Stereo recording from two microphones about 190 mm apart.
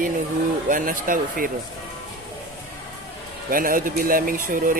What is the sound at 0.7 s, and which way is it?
Speech, 45° right (ahead or behind).